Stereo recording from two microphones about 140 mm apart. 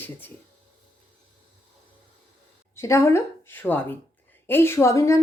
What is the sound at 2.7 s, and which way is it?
A woman's voice, 20° left (ahead or behind).